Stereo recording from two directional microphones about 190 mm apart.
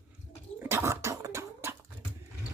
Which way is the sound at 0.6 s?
10° right (ahead or behind).